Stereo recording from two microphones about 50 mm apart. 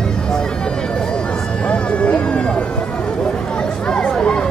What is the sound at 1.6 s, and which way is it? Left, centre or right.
Vehicle, left.